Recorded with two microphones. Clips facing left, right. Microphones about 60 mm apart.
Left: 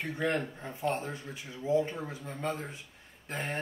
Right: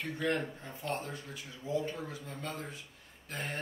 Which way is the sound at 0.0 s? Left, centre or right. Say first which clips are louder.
Left 2 dB; left.